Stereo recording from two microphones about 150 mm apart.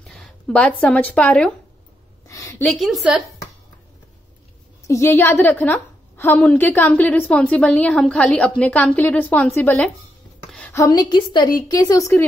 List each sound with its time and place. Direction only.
0.0 s speech: 5° left (ahead or behind)
2.2 s a sound: 20° left (ahead or behind)
2.6 s a woman's voice: centre (ahead or behind)
4.8 s a woman's voice: 20° left (ahead or behind)
10.7 s a woman's voice: 25° left (ahead or behind)